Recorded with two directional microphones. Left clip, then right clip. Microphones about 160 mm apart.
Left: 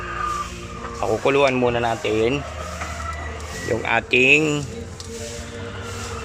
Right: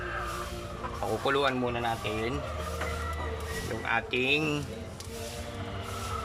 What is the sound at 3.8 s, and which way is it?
Speech, 25° left (ahead or behind).